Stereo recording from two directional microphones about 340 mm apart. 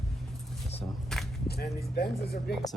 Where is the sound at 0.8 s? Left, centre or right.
Centre.